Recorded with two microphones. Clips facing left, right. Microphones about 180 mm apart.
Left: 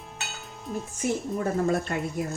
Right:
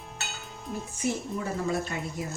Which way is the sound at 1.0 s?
50° left (ahead or behind).